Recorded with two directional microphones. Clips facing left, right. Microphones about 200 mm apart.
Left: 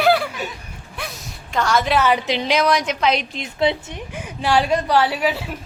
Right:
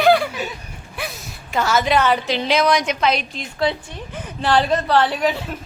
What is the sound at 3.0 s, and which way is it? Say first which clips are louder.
A woman's voice: even; 20° left (ahead or behind).